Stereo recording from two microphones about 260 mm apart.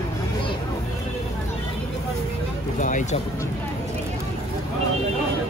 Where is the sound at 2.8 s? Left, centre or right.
Left.